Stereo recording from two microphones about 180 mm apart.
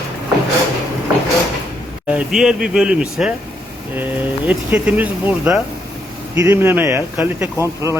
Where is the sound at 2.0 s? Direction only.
5° right (ahead or behind).